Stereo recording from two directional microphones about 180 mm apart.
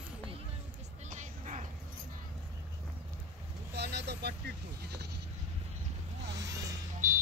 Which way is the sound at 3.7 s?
65° right (ahead or behind).